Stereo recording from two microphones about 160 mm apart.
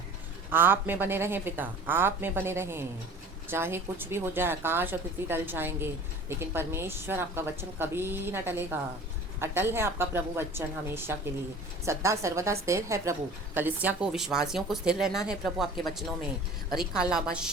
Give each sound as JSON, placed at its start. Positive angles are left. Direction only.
{"t": 0.5, "sound": "a woman's voice", "side_deg": -15}
{"t": 16.6, "sound": "a woman's voice", "side_deg": -5}